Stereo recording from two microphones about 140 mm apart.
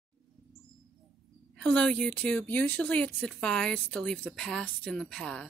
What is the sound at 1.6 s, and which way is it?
A woman's voice, 5° left (ahead or behind).